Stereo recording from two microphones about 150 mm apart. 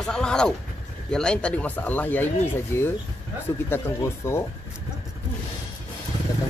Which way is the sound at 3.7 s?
15° left (ahead or behind).